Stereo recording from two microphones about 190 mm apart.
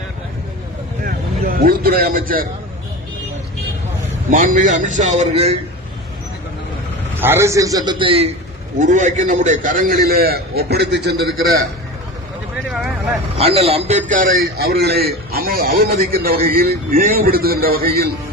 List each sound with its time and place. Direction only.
1.0 s vehicle: 50° right (ahead or behind)
4.3 s a man's voice: 45° right (ahead or behind)
7.2 s a man's voice: 10° right (ahead or behind); by 8.3 s 30° right (ahead or behind)
8.8 s a man's voice: 40° right (ahead or behind); by 11.3 s 60° right (ahead or behind)
12.7 s speech: centre (ahead or behind)
13.4 s a man's voice: 30° right (ahead or behind)
14.1 s a man's voice: 50° right (ahead or behind)